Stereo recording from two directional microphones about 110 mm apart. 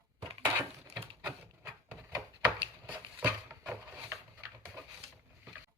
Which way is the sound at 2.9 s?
15° right (ahead or behind).